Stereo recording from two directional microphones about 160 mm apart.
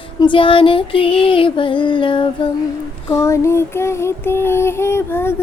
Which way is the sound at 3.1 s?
20° left (ahead or behind).